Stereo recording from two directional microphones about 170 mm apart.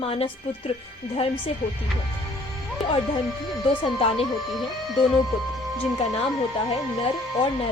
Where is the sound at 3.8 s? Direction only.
35° left (ahead or behind).